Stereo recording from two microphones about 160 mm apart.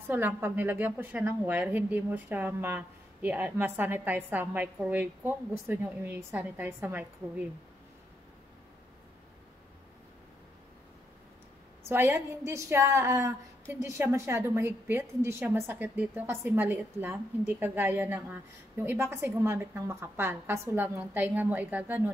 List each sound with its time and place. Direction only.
0.1 s a woman's voice: 15° right (ahead or behind)
11.9 s a woman's voice: 15° right (ahead or behind)